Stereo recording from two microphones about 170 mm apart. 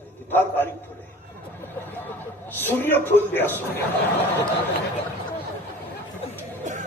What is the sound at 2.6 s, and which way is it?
A man's voice, 10° left (ahead or behind).